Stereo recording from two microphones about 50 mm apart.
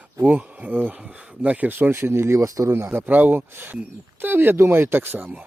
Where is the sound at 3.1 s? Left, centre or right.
Right.